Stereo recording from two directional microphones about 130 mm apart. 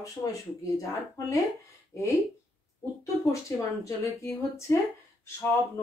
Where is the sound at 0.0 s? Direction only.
25° left (ahead or behind).